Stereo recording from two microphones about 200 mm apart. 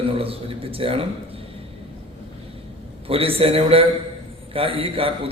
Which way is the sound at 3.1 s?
30° right (ahead or behind).